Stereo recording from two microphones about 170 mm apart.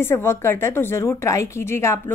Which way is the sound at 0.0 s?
15° left (ahead or behind).